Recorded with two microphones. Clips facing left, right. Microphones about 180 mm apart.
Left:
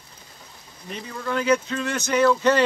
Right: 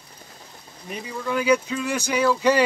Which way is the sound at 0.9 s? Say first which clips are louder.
Right 1 dB; 10° right (ahead or behind).